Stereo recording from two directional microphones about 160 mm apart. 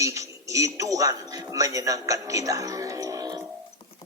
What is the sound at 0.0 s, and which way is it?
A man's voice, 20° right (ahead or behind).